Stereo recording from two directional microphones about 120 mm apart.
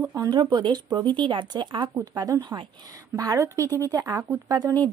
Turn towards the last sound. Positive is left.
turn(degrees=-35)  # may be behind; listen again after turning